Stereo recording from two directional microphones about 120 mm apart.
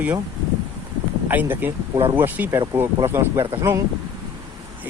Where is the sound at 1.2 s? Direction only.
15° right (ahead or behind).